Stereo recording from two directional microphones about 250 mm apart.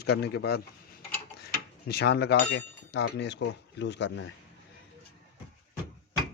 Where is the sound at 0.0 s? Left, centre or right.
Left.